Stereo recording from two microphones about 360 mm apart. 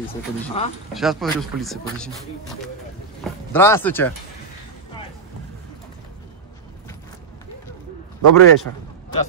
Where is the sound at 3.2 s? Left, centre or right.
Centre.